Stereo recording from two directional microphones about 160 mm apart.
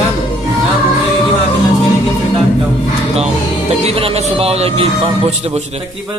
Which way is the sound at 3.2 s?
40° right (ahead or behind).